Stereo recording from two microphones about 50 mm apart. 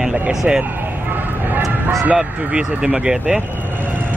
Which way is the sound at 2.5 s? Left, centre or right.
Right.